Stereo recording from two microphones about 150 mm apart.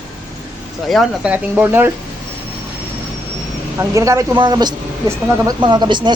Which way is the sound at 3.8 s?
20° right (ahead or behind).